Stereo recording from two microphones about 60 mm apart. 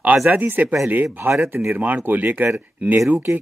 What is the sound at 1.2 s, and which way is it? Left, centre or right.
Speech, right.